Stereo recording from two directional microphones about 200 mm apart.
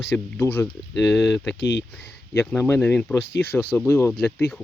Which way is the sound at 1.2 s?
Centre (ahead or behind).